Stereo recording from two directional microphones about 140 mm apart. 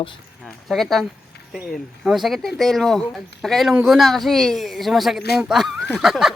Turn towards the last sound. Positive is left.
turn(degrees=-5)  # may be behind; listen again after turning